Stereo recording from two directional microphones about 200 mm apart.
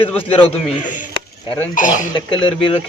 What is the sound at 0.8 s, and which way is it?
Speech, 40° left (ahead or behind).